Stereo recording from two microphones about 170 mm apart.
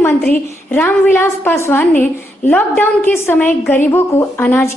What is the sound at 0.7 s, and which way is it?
A woman's voice, 10° left (ahead or behind).